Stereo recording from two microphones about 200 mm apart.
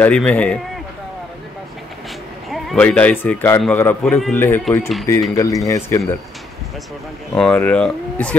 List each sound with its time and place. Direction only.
0.0 s a man's voice: 5° left (ahead or behind)
2.5 s speech: 5° left (ahead or behind)
7.3 s speech: 5° left (ahead or behind)